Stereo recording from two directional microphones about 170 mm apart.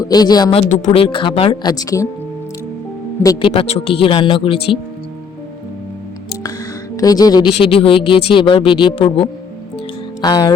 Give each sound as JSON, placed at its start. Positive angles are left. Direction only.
{"t": 0.0, "sound": "speech", "side_deg": 25}
{"t": 0.7, "sound": "speech", "side_deg": 45}
{"t": 0.9, "sound": "speech", "side_deg": 30}
{"t": 3.2, "sound": "speech", "side_deg": 30}
{"t": 6.9, "sound": "speech", "side_deg": 20}